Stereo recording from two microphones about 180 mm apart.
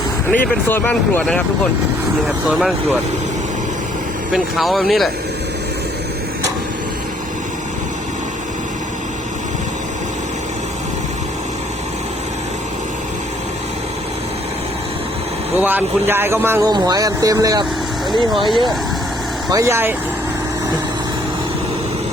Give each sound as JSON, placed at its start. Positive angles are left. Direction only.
{"t": 0.3, "sound": "speech", "side_deg": 10}
{"t": 2.5, "sound": "speech", "side_deg": 0}
{"t": 4.3, "sound": "speech", "side_deg": 0}
{"t": 15.5, "sound": "speech", "side_deg": -10}
{"t": 18.4, "sound": "speech", "side_deg": 0}
{"t": 19.5, "sound": "speech", "side_deg": -15}